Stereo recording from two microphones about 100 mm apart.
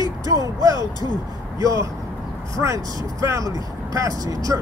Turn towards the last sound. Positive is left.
turn(degrees=-35)  # may be behind; listen again after turning